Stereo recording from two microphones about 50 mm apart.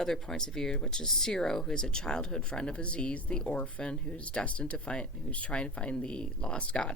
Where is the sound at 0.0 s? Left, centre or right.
Centre.